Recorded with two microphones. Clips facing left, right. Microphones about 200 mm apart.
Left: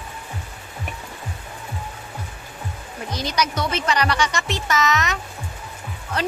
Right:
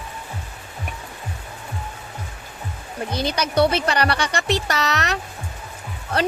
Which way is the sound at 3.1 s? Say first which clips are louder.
Even; 30° right (ahead or behind).